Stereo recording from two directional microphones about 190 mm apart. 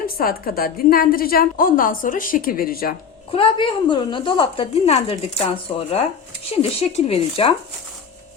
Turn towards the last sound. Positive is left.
turn(degrees=30)  # may be behind; listen again after turning